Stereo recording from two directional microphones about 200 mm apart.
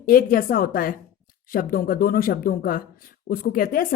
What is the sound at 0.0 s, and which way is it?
Speech, 45° left (ahead or behind).